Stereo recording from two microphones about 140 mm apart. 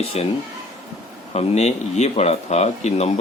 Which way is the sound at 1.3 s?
50° left (ahead or behind).